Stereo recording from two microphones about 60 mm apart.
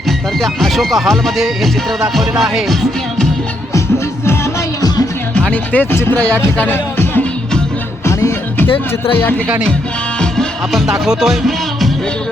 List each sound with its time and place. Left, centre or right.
0.3 s speech: centre
5.3 s speech: left
5.8 s speech: left
6.1 s speech: centre
6.7 s music: left
10.7 s music: centre